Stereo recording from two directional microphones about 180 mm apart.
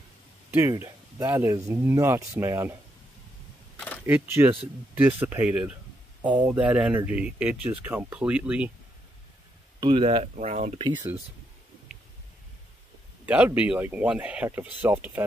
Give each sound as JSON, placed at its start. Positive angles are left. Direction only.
{"t": 0.5, "sound": "speech", "side_deg": -15}
{"t": 3.7, "sound": "camera", "side_deg": 10}
{"t": 4.0, "sound": "speech", "side_deg": -10}
{"t": 9.8, "sound": "speech", "side_deg": -30}
{"t": 13.2, "sound": "speech", "side_deg": -10}